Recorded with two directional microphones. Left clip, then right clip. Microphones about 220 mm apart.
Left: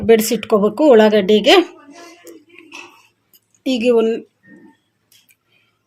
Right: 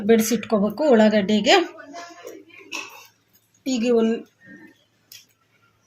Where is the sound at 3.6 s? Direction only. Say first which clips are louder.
Left 6 dB; 40° left (ahead or behind).